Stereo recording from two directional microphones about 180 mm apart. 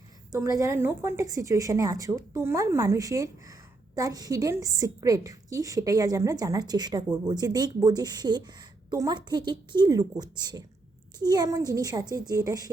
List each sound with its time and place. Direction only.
0.3 s a woman's voice: 15° right (ahead or behind)